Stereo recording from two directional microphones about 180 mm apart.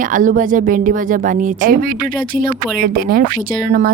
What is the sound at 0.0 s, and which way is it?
Speech, 45° right (ahead or behind).